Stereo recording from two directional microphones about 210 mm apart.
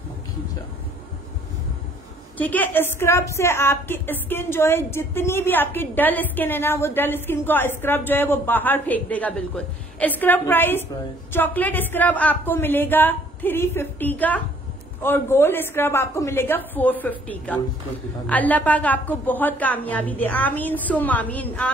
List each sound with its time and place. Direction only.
2.3 s a woman's voice: 10° left (ahead or behind)